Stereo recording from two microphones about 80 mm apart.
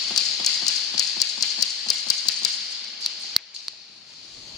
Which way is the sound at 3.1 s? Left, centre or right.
Centre.